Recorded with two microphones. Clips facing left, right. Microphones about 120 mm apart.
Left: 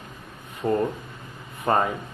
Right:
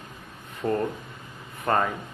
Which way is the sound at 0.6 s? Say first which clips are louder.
Left 3 dB; 10° left (ahead or behind).